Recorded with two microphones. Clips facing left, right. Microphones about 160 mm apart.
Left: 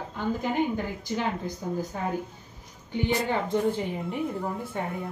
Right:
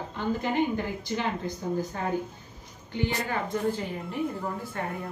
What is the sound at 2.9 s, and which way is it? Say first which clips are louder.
A woman's voice: left 3 dB; 20° left (ahead or behind).